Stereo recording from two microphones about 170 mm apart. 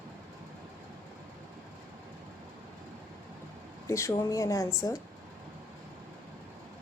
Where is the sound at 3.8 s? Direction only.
15° left (ahead or behind).